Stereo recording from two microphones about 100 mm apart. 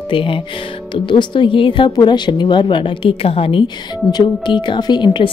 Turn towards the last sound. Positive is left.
turn(degrees=50)  # may be behind; listen again after turning